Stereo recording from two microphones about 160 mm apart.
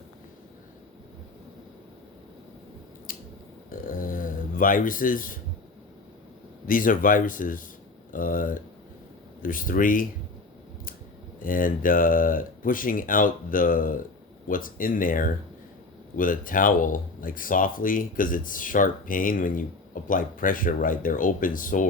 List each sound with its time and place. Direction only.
3.1 s a sound: 60° left (ahead or behind)
6.7 s speech: 60° left (ahead or behind)
11.4 s speech: 60° left (ahead or behind)